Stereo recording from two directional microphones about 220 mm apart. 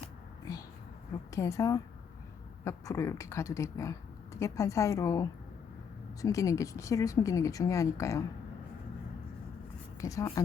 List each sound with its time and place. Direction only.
1.3 s speech: 15° left (ahead or behind)
10.0 s speech: 15° left (ahead or behind)